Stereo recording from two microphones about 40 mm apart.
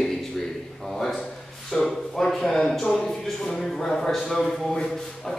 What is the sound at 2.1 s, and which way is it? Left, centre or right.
A man's voice, centre.